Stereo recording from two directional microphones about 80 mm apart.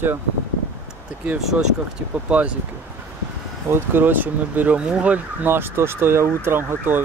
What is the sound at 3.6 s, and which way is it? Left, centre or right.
Speech, right.